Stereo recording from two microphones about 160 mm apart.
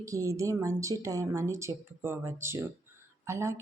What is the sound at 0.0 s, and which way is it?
A woman's voice, 20° right (ahead or behind).